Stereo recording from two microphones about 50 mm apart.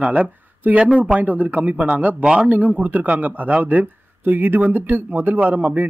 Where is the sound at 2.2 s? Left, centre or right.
Centre.